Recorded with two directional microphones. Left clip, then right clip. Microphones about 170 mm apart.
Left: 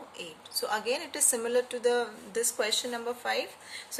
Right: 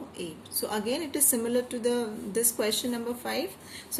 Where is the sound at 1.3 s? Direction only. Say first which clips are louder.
Left 1 dB; 25° left (ahead or behind).